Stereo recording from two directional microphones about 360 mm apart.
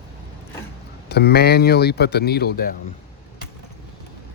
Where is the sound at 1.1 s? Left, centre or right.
Left.